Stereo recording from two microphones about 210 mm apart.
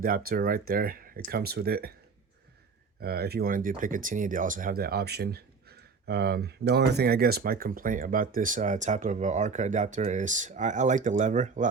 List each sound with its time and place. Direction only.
0.0 s speech: 45° right (ahead or behind)
3.0 s speech: 50° right (ahead or behind)